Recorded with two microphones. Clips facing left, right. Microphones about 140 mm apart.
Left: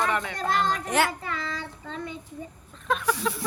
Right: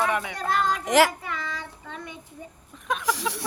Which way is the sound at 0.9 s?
90° right.